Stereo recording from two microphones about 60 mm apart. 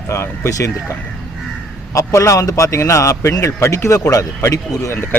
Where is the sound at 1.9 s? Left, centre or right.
Left.